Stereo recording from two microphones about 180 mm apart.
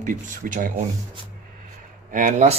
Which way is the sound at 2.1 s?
45° right (ahead or behind).